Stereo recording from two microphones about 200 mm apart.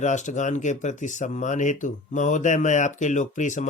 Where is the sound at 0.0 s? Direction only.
35° left (ahead or behind).